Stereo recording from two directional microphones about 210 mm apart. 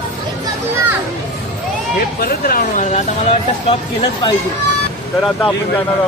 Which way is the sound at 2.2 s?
45° left (ahead or behind).